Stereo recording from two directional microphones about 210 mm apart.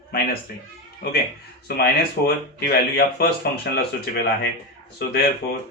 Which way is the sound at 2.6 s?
50° left (ahead or behind).